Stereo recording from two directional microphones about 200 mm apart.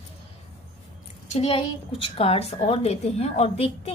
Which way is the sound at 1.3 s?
30° left (ahead or behind).